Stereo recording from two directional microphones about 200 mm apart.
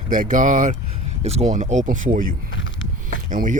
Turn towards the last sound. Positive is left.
turn(degrees=-40)  # may be behind; listen again after turning